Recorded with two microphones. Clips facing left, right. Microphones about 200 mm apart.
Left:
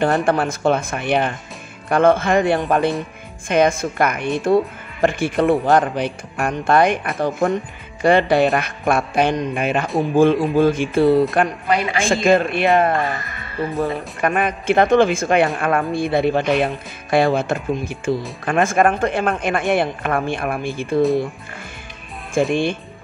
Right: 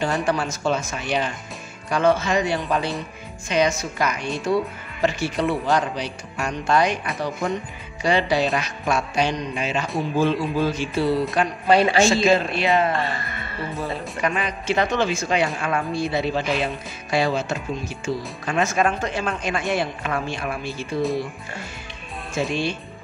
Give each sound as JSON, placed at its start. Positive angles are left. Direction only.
{"t": 0.0, "sound": "speech", "side_deg": 55}
{"t": 11.6, "sound": "a woman's voice", "side_deg": -30}
{"t": 12.0, "sound": "speech", "side_deg": 55}
{"t": 22.3, "sound": "speech", "side_deg": 50}